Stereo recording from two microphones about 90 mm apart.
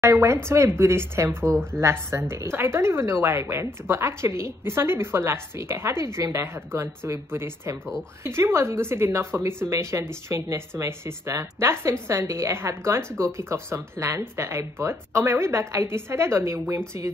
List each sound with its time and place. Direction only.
0.0 s a woman's voice: 30° right (ahead or behind)